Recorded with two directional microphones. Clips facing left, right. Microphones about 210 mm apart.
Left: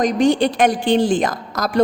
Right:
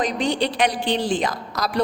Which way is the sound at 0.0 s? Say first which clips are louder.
Left 7 dB; 45° left (ahead or behind).